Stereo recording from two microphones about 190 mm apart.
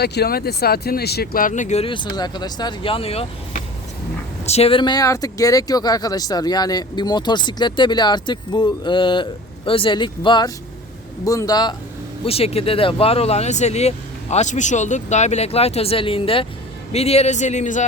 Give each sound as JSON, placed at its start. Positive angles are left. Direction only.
{"t": 0.0, "sound": "speech", "side_deg": 60}
{"t": 4.4, "sound": "speech", "side_deg": 35}